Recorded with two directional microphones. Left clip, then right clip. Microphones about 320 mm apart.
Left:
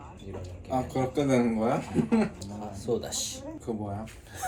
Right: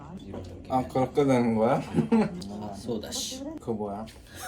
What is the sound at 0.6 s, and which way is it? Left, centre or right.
Speech, centre.